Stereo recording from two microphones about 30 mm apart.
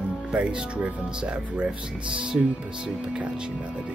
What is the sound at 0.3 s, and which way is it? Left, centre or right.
Speech, right.